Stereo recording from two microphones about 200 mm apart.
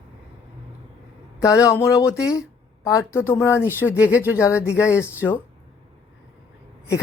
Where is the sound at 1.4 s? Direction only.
15° left (ahead or behind).